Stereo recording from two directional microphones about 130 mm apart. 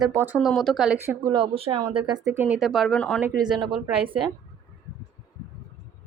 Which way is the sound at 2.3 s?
15° right (ahead or behind).